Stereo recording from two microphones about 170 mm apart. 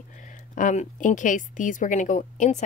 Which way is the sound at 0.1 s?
50° left (ahead or behind).